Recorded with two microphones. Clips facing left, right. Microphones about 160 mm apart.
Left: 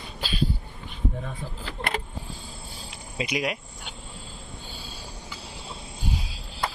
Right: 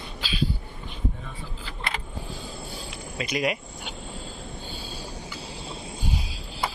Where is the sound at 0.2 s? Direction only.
50° left (ahead or behind).